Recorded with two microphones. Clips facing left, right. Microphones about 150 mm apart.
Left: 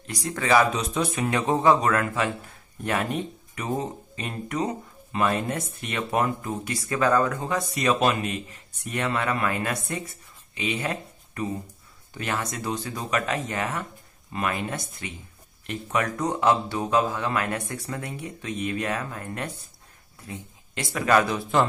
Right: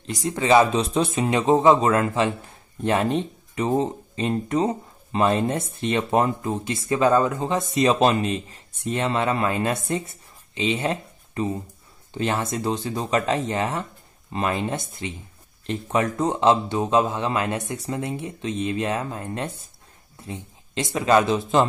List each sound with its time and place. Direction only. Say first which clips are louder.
0.0 s speech: right 4 dB; 20° right (ahead or behind)